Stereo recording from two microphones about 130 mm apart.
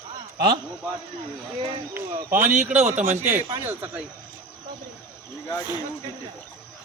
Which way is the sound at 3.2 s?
15° right (ahead or behind).